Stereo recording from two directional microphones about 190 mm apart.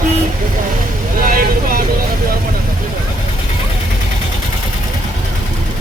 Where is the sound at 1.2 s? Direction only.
50° right (ahead or behind).